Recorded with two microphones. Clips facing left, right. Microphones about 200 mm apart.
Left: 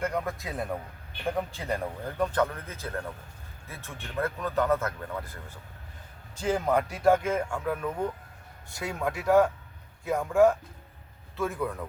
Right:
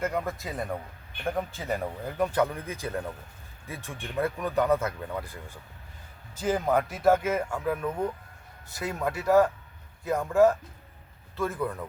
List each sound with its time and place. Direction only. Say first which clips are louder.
0.0 s speech: right 1 dB; 5° right (ahead or behind)
6.4 s speech: right 1 dB; 5° right (ahead or behind)